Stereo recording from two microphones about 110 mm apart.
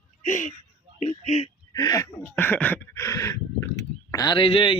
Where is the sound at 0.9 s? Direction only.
90° left.